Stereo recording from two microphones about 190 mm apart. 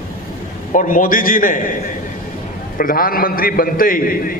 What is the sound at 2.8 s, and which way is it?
A man's voice, 50° left (ahead or behind).